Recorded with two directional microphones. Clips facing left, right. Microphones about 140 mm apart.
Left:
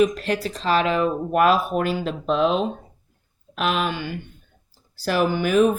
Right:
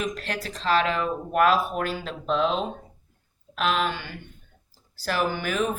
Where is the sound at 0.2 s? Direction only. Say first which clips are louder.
Left 7 dB; 15° left (ahead or behind).